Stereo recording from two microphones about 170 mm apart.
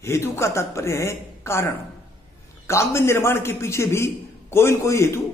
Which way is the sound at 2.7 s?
15° left (ahead or behind).